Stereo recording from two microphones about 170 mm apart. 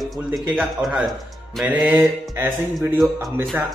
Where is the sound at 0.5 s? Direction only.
Centre (ahead or behind).